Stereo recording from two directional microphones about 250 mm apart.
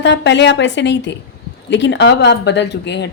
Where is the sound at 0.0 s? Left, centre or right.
Left.